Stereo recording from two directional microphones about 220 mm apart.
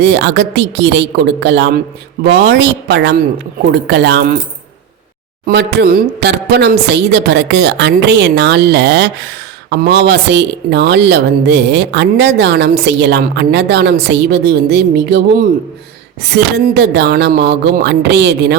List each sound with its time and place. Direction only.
0.0 s speech: 50° right (ahead or behind)
5.5 s speech: 50° right (ahead or behind)